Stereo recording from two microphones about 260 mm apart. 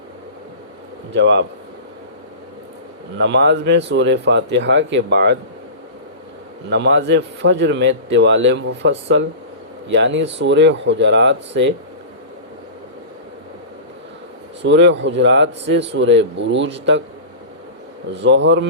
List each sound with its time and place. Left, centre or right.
1.1 s a man's voice: right
3.2 s a man's voice: right
6.7 s a man's voice: right
14.6 s a man's voice: right
18.1 s a man's voice: right